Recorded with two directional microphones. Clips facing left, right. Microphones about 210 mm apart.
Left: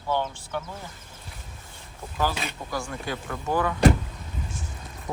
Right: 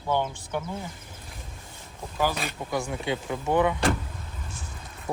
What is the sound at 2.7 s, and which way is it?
Speech, 20° right (ahead or behind).